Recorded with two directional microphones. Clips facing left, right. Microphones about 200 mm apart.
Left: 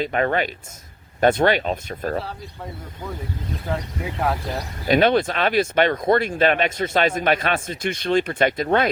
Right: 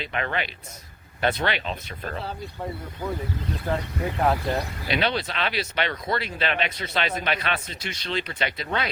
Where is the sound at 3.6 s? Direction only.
Centre (ahead or behind).